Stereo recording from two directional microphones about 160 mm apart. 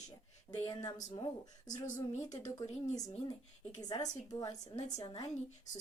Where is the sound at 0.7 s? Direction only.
25° left (ahead or behind).